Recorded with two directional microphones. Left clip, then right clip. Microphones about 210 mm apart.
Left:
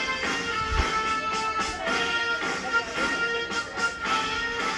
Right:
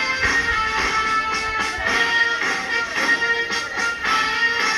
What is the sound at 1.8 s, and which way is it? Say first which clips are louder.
Music: right 9 dB; 55° left (ahead or behind).